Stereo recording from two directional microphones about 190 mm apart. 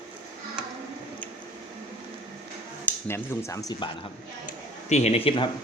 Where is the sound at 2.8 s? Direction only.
15° left (ahead or behind).